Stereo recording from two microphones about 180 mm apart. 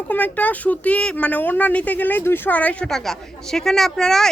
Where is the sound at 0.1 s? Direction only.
10° left (ahead or behind).